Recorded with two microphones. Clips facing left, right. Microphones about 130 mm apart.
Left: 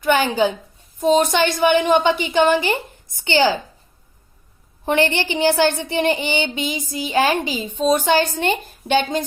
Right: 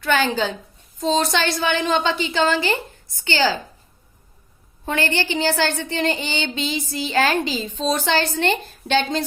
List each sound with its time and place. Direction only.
0.0 s a woman's voice: 15° left (ahead or behind)
4.9 s a woman's voice: 20° left (ahead or behind)